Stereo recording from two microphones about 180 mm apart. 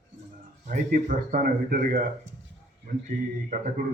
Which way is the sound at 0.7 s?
50° right (ahead or behind).